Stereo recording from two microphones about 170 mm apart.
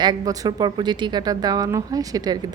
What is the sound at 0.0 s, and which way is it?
A woman's voice, 25° right (ahead or behind).